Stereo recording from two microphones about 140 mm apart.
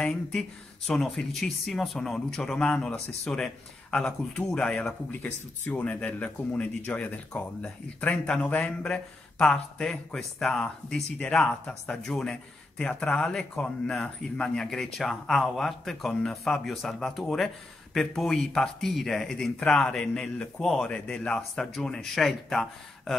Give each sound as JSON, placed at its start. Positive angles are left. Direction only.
{"t": 0.0, "sound": "speech", "side_deg": 5}